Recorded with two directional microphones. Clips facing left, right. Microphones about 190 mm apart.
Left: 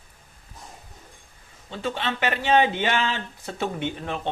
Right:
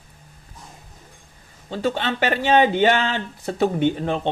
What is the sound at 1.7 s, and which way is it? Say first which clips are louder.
A man's voice: right 5 dB; 40° right (ahead or behind).